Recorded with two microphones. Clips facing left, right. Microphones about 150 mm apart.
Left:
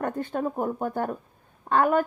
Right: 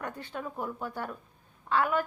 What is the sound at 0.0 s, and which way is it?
A woman's voice, 50° left (ahead or behind).